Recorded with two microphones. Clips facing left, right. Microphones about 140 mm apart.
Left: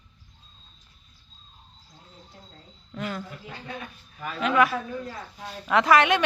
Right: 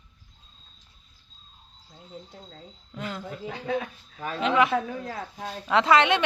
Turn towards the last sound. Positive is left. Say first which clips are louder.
# left 1 dB
turn(degrees=-25)  # may be behind; listen again after turning